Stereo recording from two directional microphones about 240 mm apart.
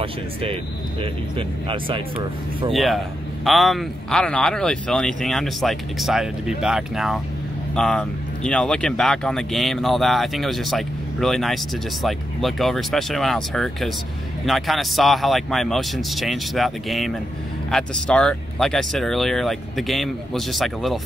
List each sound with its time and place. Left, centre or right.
0.0 s speech: right
2.7 s speech: centre